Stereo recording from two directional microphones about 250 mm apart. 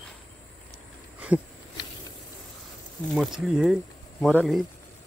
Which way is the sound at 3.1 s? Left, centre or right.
Centre.